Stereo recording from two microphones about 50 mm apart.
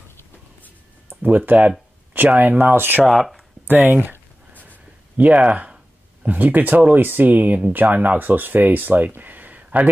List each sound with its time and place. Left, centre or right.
1.2 s speech: right
3.1 s speech: centre
3.6 s a sound: right
6.2 s speech: right